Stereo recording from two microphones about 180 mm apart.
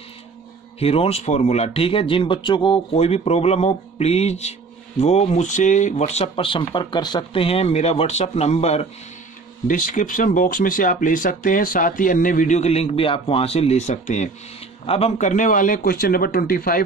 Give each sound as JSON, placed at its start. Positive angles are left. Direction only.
{"t": 0.7, "sound": "speech", "side_deg": 35}
{"t": 9.7, "sound": "speech", "side_deg": 50}